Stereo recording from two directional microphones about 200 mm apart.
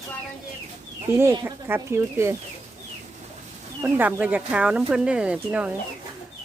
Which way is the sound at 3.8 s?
10° right (ahead or behind).